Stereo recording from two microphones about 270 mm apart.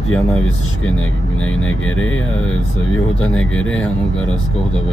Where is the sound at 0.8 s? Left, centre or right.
Left.